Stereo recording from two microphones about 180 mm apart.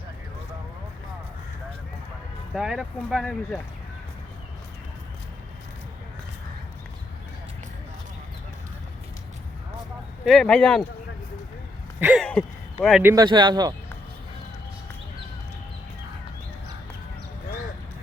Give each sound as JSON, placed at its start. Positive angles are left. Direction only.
{"t": 2.6, "sound": "speech", "side_deg": 0}
{"t": 10.2, "sound": "speech", "side_deg": 5}
{"t": 11.9, "sound": "a sound", "side_deg": -5}
{"t": 12.2, "sound": "speech", "side_deg": 5}
{"t": 13.0, "sound": "speech", "side_deg": -10}
{"t": 13.2, "sound": "speech", "side_deg": -25}